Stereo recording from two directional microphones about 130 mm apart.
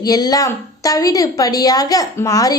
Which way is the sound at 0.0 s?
30° left (ahead or behind).